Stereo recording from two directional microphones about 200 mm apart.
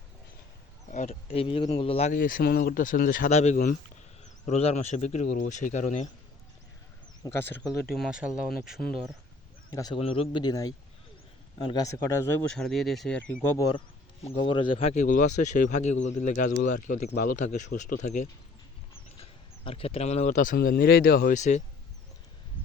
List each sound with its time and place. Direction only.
0.9 s speech: 35° left (ahead or behind)
2.1 s speech: 45° left (ahead or behind)
7.2 s speech: 10° left (ahead or behind)
7.9 s speech: 5° right (ahead or behind)
9.6 s speech: 20° left (ahead or behind); by 21.6 s 35° left (ahead or behind)